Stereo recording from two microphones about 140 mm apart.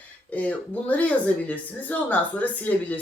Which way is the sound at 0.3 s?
10° left (ahead or behind).